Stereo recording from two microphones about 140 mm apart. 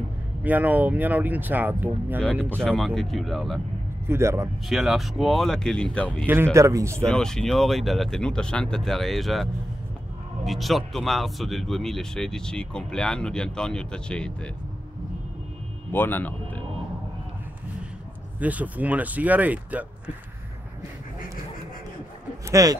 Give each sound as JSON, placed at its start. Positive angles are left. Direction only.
{"t": 0.4, "sound": "speech", "side_deg": -10}
{"t": 2.5, "sound": "speech", "side_deg": 5}
{"t": 4.1, "sound": "speech", "side_deg": -20}
{"t": 4.6, "sound": "speech", "side_deg": 0}
{"t": 6.2, "sound": "speech", "side_deg": -15}
{"t": 7.1, "sound": "speech", "side_deg": 5}
{"t": 15.9, "sound": "speech", "side_deg": 15}
{"t": 18.4, "sound": "speech", "side_deg": -10}
{"t": 22.5, "sound": "speech", "side_deg": -25}